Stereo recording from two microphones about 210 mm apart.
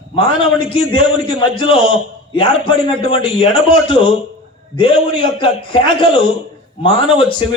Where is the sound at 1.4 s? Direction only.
25° left (ahead or behind).